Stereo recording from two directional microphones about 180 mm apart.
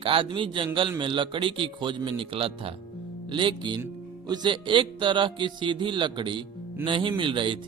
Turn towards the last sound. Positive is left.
turn(degrees=-30)  # may be behind; listen again after turning